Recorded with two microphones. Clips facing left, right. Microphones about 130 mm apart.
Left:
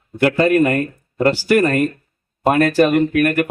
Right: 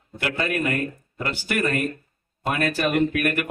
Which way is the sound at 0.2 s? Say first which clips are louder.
Left 12 dB; 45° left (ahead or behind).